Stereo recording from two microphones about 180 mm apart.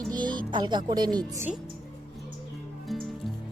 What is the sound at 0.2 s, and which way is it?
Speech, 25° right (ahead or behind).